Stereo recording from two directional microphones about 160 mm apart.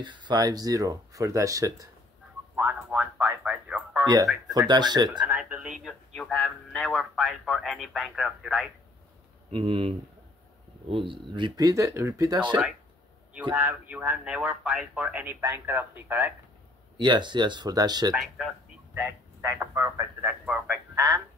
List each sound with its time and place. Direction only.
0.0 s speech: 30° right (ahead or behind)
2.5 s radio: 10° right (ahead or behind)
4.0 s speech: 25° right (ahead or behind)
5.2 s a man's voice: 10° right (ahead or behind)
9.5 s speech: 35° right (ahead or behind)
13.6 s speech: 10° right (ahead or behind)
16.9 s speech: 30° right (ahead or behind)
18.1 s a man's voice: centre (ahead or behind)
18.9 s speech: 15° right (ahead or behind)